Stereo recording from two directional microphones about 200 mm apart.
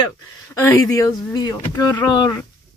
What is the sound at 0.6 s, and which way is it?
Speech, 15° left (ahead or behind).